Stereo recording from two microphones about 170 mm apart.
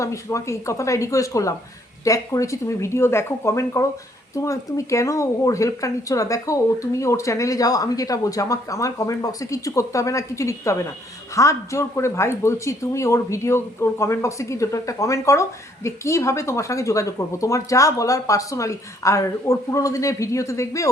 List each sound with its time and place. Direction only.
0.0 s speech: 15° left (ahead or behind)